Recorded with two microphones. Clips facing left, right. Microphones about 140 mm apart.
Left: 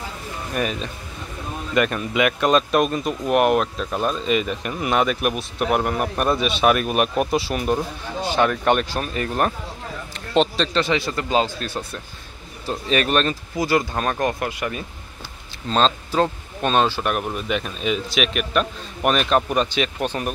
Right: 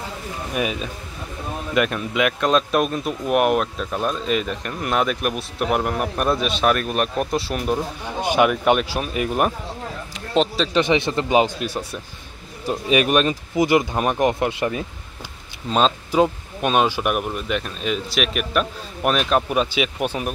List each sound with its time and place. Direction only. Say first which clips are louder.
0.5 s speech: even; 5° right (ahead or behind)
8.2 s a man's voice: right 2 dB; 15° right (ahead or behind)
10.8 s speech: right 5 dB; 20° right (ahead or behind)
15.7 s speech: right 1 dB; 10° right (ahead or behind)